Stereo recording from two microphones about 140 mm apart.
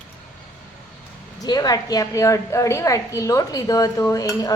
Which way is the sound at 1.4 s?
25° left (ahead or behind).